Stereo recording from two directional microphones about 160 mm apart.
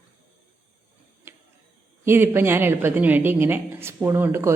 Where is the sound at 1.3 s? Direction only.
15° right (ahead or behind).